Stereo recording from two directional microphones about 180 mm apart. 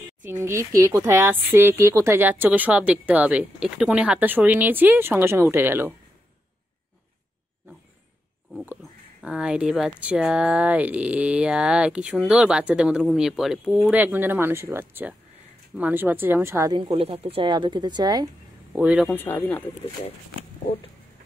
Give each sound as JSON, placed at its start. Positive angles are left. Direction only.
{"t": 0.2, "sound": "a woman's voice", "side_deg": -15}
{"t": 9.2, "sound": "a woman's voice", "side_deg": -5}
{"t": 16.7, "sound": "speech", "side_deg": -30}
{"t": 18.8, "sound": "speech", "side_deg": -5}
{"t": 19.1, "sound": "speech", "side_deg": 10}